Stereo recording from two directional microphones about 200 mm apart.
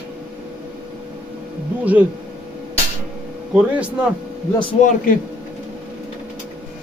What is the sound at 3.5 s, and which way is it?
Speech, 5° right (ahead or behind).